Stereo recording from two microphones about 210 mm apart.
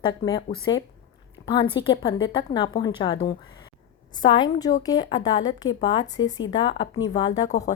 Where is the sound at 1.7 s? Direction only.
20° left (ahead or behind).